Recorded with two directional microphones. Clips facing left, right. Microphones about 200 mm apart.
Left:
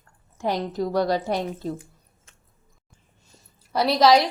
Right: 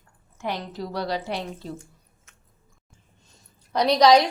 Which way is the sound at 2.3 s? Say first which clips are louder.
Left 1 dB; 30° left (ahead or behind).